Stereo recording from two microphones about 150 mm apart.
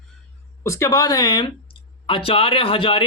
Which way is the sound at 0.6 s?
15° left (ahead or behind).